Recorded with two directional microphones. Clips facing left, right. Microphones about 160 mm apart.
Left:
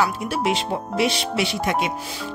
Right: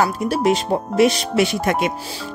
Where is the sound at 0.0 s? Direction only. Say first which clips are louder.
Right 4 dB; 40° right (ahead or behind).